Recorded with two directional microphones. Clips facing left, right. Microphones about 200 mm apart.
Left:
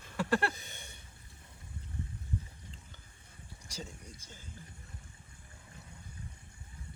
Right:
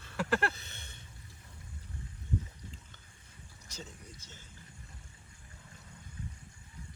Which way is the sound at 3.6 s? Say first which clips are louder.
Left 2 dB; 10° left (ahead or behind).